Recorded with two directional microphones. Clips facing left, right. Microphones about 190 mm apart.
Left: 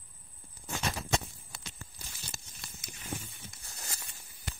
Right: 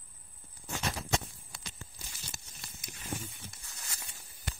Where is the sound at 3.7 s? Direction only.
35° left (ahead or behind).